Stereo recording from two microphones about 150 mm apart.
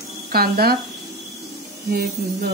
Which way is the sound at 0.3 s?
90° right.